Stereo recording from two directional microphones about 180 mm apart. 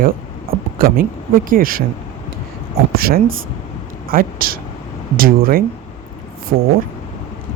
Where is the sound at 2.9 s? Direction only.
55° right (ahead or behind).